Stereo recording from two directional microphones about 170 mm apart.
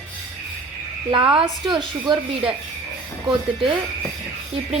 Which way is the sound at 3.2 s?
30° right (ahead or behind).